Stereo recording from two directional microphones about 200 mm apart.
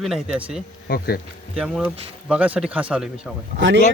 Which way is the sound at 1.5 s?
5° right (ahead or behind).